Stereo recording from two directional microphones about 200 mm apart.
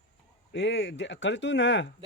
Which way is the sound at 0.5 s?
65° left (ahead or behind).